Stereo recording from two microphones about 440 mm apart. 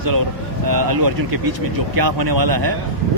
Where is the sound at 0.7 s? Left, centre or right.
Right.